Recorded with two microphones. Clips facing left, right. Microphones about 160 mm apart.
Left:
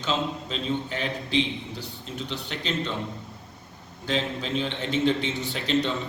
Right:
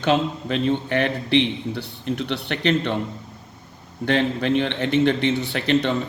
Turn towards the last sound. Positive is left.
turn(degrees=-65)  # may be behind; listen again after turning